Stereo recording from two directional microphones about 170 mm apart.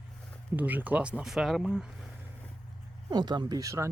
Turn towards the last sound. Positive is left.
turn(degrees=-20)  # may be behind; listen again after turning